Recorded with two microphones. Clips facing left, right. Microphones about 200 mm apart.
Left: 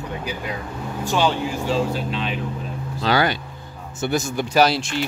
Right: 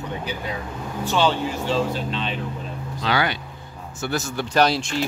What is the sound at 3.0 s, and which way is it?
Speech, 40° left (ahead or behind).